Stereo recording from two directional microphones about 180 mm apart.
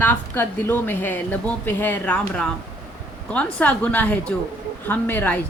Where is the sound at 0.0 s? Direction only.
10° left (ahead or behind).